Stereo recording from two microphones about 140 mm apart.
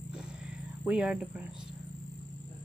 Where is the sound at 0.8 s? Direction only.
10° right (ahead or behind).